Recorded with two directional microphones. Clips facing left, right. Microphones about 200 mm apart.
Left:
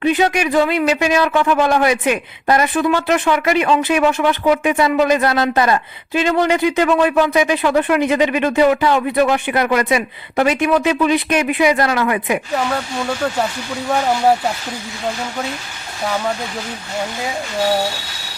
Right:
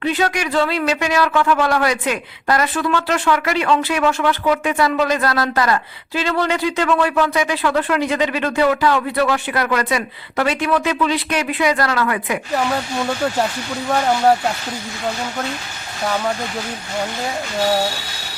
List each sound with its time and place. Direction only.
0.0 s speech: 15° left (ahead or behind)